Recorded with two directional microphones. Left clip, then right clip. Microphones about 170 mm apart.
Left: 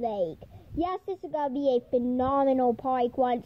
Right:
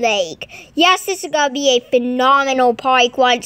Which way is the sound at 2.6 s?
45° right (ahead or behind).